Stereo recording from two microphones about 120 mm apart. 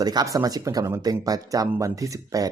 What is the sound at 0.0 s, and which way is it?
Speech, 35° right (ahead or behind).